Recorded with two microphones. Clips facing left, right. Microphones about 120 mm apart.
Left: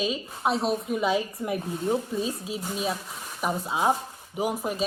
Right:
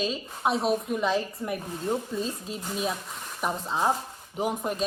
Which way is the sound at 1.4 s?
20° left (ahead or behind).